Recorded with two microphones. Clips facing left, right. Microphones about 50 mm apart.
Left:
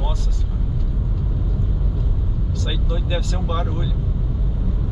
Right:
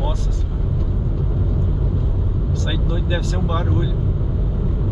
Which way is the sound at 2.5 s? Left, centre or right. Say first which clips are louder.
Right 3 dB; centre.